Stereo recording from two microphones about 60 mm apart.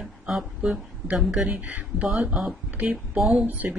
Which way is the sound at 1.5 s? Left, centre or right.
Right.